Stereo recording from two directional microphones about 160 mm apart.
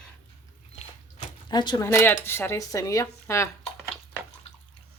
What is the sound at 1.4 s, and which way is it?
Speech, 25° left (ahead or behind).